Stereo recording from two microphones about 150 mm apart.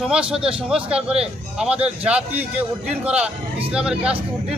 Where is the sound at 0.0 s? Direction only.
5° right (ahead or behind).